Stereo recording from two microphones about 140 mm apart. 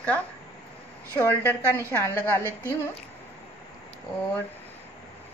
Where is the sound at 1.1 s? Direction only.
15° left (ahead or behind).